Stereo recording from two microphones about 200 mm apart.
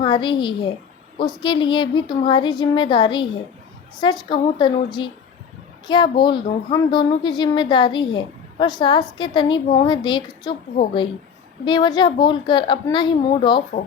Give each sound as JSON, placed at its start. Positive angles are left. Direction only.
{"t": 0.0, "sound": "a woman's voice", "side_deg": 25}
{"t": 11.6, "sound": "a woman's voice", "side_deg": 20}